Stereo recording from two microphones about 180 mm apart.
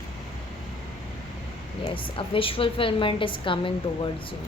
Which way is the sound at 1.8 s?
30° left (ahead or behind).